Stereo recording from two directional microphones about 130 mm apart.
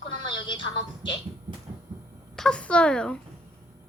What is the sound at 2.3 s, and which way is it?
Speech, 5° left (ahead or behind).